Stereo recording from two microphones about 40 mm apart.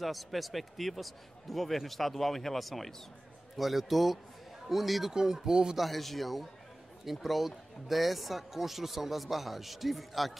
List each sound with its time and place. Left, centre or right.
0.0 s speech: centre
5.1 s speech: centre
5.8 s speech: centre